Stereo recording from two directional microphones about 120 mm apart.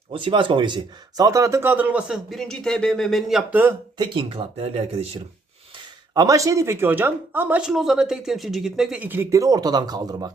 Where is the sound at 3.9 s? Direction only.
40° right (ahead or behind).